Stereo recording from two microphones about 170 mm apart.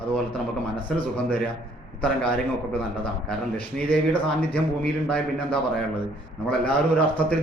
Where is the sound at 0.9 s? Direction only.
10° left (ahead or behind).